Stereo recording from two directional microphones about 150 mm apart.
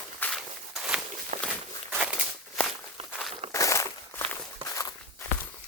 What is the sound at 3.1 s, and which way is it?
Walk, 5° right (ahead or behind).